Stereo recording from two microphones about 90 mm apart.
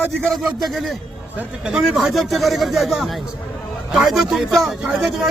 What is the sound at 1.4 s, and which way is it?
Speech, 15° right (ahead or behind).